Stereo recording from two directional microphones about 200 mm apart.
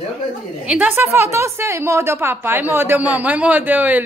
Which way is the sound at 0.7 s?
10° right (ahead or behind).